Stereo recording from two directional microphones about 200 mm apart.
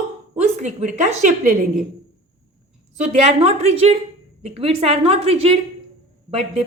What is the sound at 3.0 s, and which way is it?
A woman's voice, 30° right (ahead or behind).